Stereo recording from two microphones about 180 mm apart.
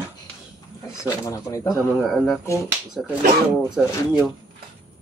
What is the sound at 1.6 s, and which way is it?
Speech, centre (ahead or behind).